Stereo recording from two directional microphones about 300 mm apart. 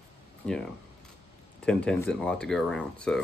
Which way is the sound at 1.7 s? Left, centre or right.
Centre.